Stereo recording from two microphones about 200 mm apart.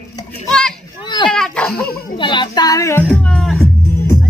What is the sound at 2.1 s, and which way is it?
Music, 25° left (ahead or behind).